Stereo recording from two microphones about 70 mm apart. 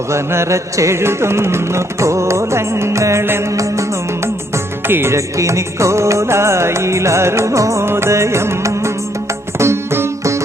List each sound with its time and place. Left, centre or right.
0.1 s music: right
3.5 s music: right
4.5 s music: right